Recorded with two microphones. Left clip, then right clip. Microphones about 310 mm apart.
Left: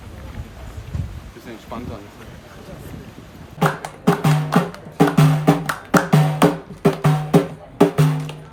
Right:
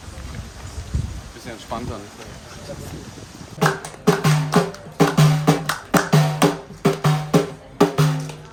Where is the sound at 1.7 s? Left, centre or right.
Right.